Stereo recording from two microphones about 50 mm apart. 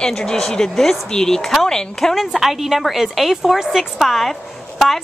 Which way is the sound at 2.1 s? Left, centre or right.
Centre.